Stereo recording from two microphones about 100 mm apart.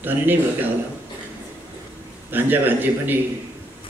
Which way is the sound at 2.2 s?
20° right (ahead or behind).